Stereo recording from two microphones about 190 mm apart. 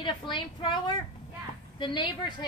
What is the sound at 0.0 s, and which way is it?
A woman's voice, 25° left (ahead or behind).